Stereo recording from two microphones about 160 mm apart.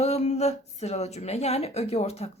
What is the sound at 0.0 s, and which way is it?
A woman's voice, 45° left (ahead or behind).